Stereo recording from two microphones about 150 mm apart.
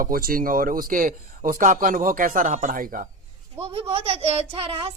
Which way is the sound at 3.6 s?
40° right (ahead or behind).